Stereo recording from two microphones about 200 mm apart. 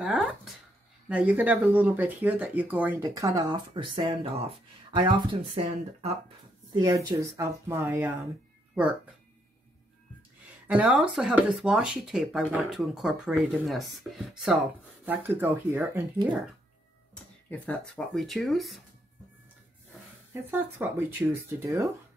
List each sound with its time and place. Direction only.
0.0 s speech: centre (ahead or behind); by 5.6 s 25° right (ahead or behind)
6.7 s speech: 20° right (ahead or behind)
10.7 s speech: 5° right (ahead or behind)
17.5 s speech: 5° left (ahead or behind)
20.5 s speech: 10° right (ahead or behind)